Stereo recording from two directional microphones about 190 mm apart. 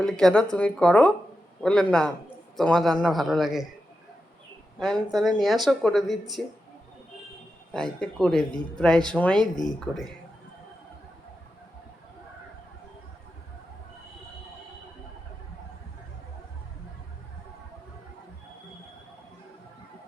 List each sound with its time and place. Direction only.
0.0 s speech: 5° left (ahead or behind)
4.8 s speech: centre (ahead or behind)
7.7 s speech: 5° left (ahead or behind)